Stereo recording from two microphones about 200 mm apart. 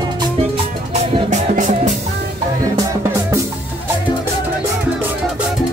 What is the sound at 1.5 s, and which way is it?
Music, 40° right (ahead or behind).